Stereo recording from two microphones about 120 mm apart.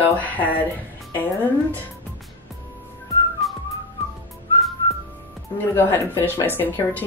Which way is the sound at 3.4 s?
Centre (ahead or behind).